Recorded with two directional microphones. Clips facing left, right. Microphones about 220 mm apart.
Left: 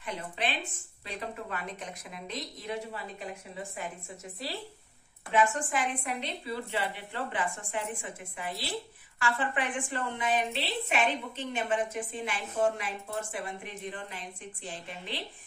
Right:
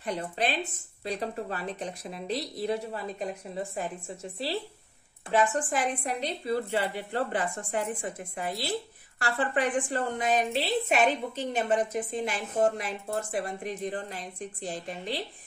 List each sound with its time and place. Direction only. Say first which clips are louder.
0.0 s a woman's voice: right 5 dB; 40° right (ahead or behind)